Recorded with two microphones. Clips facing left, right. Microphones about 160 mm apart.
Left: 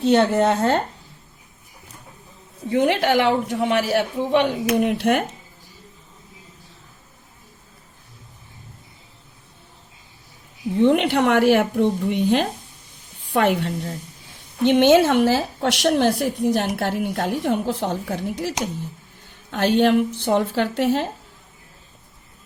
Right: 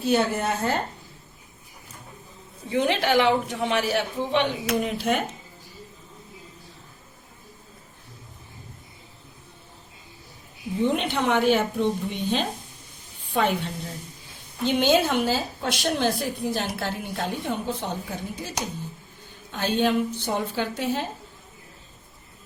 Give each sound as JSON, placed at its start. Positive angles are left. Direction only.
{"t": 0.0, "sound": "a woman's voice", "side_deg": 75}
{"t": 2.7, "sound": "speech", "side_deg": 60}
{"t": 10.8, "sound": "a woman's voice", "side_deg": 65}
{"t": 14.6, "sound": "a woman's voice", "side_deg": 75}